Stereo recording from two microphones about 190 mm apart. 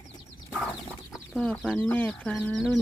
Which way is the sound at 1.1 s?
Centre (ahead or behind).